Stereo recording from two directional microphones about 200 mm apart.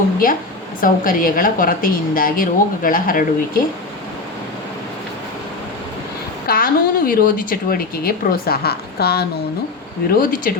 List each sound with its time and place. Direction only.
0.2 s a woman's voice: 45° left (ahead or behind)
6.5 s a woman's voice: 45° left (ahead or behind)